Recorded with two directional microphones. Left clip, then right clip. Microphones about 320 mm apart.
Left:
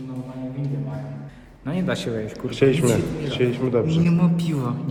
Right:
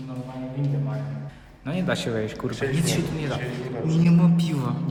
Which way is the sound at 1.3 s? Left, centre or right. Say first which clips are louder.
Left 2 dB; centre.